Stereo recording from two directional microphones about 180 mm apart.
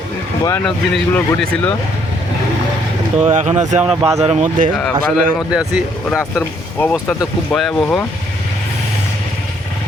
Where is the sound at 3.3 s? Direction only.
40° right (ahead or behind).